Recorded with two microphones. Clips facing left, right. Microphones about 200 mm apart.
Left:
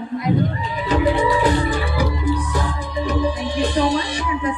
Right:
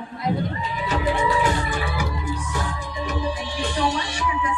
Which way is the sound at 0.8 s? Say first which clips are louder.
Left 5 dB; 35° left (ahead or behind).